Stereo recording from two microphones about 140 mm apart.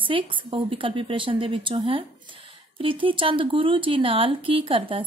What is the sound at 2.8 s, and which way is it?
Speech, 40° right (ahead or behind).